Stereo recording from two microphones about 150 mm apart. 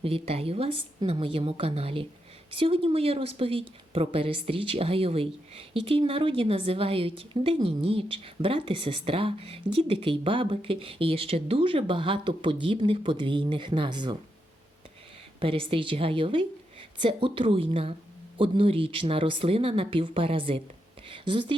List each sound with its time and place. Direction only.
0.0 s speech: 40° right (ahead or behind)
15.4 s speech: 35° right (ahead or behind)